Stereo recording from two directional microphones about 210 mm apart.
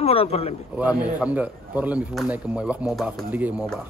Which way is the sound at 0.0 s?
30° left (ahead or behind).